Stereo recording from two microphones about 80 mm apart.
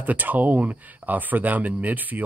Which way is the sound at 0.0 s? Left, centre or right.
Right.